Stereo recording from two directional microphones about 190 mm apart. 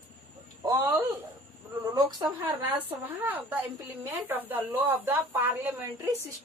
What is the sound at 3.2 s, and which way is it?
Speech, 10° right (ahead or behind).